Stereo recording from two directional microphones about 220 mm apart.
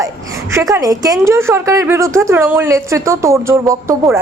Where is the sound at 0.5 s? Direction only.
15° right (ahead or behind).